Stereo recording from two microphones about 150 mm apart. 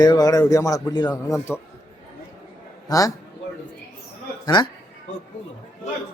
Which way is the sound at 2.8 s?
25° left (ahead or behind).